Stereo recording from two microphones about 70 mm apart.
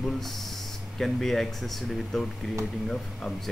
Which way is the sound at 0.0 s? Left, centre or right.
Centre.